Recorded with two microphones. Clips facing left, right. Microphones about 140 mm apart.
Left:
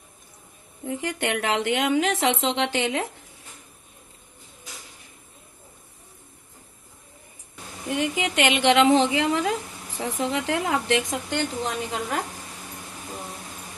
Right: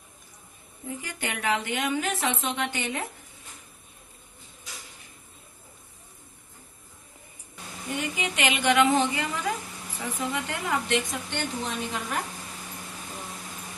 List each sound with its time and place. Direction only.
0.8 s a woman's voice: 80° left
7.9 s a woman's voice: 90° left